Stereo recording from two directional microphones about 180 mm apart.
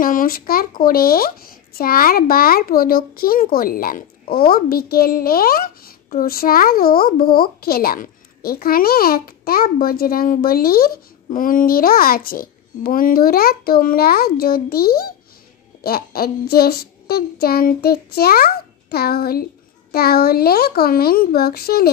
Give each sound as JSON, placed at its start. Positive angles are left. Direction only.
{"t": 0.0, "sound": "a child's voice", "side_deg": 50}